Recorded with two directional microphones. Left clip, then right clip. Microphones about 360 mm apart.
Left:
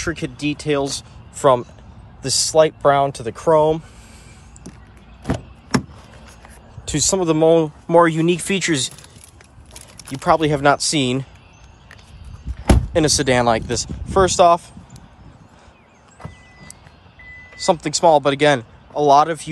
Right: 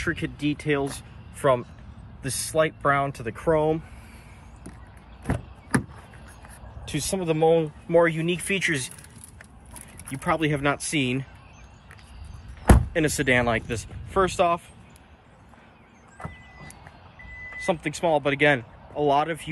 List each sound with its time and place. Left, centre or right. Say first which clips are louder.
0.0 s speech: left 4 dB; centre
5.2 s a sound: left 6 dB; left
6.8 s speech: left 10 dB; centre
9.9 s speech: left 9 dB; centre
12.6 s speech: left 5 dB; centre
17.7 s speech: left 11 dB; centre